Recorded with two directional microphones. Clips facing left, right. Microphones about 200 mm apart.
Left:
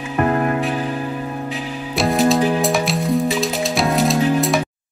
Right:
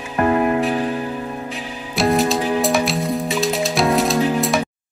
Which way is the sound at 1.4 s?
Centre (ahead or behind).